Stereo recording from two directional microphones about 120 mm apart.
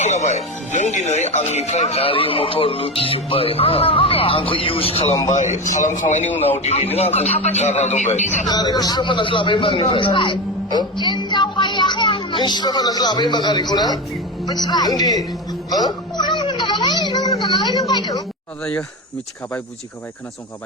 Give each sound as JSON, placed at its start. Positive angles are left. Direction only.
{"t": 0.0, "sound": "speech", "side_deg": 80}
{"t": 5.3, "sound": "a man's voice", "side_deg": 80}
{"t": 6.6, "sound": "a man's voice", "side_deg": 65}
{"t": 8.4, "sound": "a man's voice", "side_deg": 35}
{"t": 15.9, "sound": "music", "side_deg": 40}
{"t": 17.4, "sound": "a sound", "side_deg": 40}
{"t": 18.6, "sound": "speech", "side_deg": 10}